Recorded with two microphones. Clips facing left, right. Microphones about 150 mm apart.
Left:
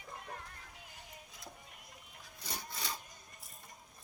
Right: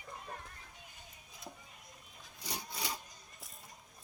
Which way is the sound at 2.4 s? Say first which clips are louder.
Right 2 dB; 10° right (ahead or behind).